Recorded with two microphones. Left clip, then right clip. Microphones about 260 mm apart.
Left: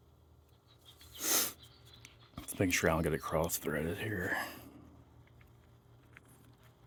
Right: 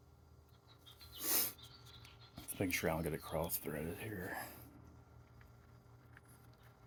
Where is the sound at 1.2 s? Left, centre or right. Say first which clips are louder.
Left 7 dB; left.